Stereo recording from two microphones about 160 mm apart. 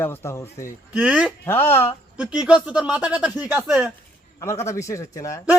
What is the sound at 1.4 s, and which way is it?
Speech, 15° left (ahead or behind).